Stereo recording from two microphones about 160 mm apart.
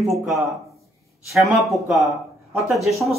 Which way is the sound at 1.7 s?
Centre (ahead or behind).